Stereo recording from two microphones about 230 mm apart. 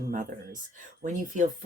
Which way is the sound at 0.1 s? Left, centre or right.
Right.